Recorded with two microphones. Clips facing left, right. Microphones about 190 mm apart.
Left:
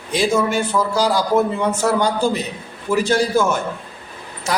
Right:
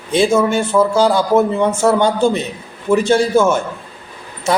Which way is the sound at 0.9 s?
25° right (ahead or behind).